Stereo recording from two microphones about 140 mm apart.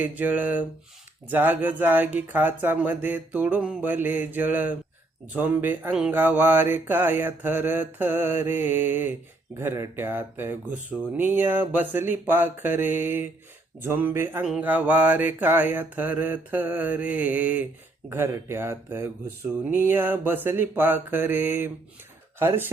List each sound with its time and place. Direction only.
0.0 s mantra: 10° right (ahead or behind)